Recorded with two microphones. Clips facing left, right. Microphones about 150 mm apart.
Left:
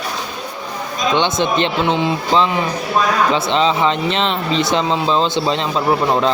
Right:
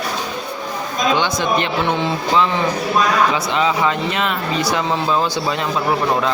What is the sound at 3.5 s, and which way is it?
A man's voice, 25° left (ahead or behind).